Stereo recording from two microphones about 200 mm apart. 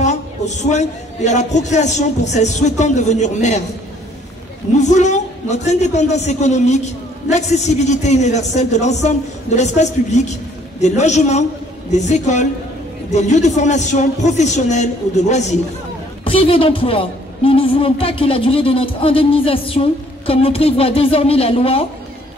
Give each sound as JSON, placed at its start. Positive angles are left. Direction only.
{"t": 0.0, "sound": "a man's voice", "side_deg": 35}
{"t": 4.7, "sound": "a man's voice", "side_deg": 35}